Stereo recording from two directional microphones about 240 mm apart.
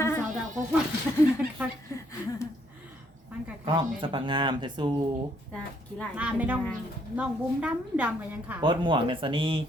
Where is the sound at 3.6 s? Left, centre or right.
Centre.